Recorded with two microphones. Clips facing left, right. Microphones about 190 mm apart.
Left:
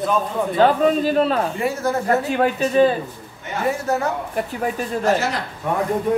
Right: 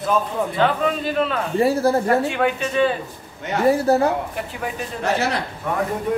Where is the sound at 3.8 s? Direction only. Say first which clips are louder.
Right 5 dB; 35° right (ahead or behind).